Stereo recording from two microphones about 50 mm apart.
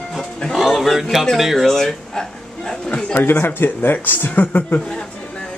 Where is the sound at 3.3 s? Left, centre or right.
Left.